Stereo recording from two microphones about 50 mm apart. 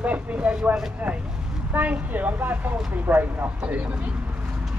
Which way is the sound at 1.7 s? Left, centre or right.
Right.